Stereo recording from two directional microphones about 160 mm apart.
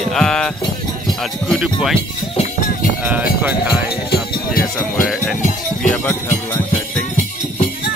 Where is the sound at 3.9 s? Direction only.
75° left (ahead or behind).